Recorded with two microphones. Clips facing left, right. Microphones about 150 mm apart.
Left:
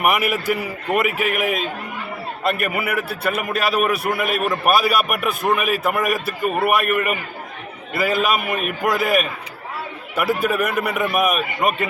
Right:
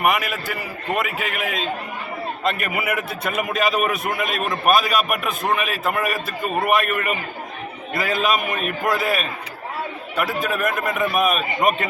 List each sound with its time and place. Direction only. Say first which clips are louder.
0.0 s a man's voice: left 2 dB; 10° left (ahead or behind)